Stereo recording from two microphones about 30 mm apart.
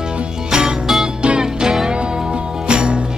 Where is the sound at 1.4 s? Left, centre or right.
Right.